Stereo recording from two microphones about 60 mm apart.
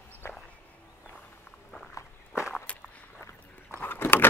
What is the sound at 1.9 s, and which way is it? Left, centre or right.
Walk, left.